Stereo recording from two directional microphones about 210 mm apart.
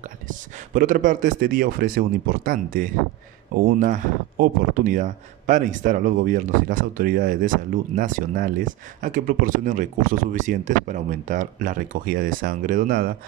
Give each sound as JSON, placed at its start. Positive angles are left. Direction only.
{"t": 0.3, "sound": "speech", "side_deg": -40}